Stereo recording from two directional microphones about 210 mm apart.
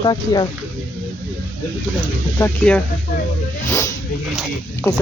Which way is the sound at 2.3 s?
10° left (ahead or behind).